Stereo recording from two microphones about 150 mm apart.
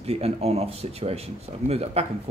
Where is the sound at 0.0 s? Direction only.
40° right (ahead or behind).